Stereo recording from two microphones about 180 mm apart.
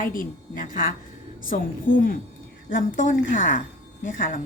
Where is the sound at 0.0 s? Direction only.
50° left (ahead or behind).